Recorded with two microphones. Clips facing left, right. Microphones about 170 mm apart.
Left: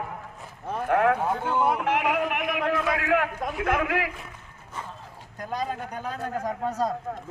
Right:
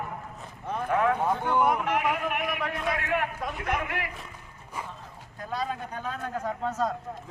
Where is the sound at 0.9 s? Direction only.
65° left (ahead or behind).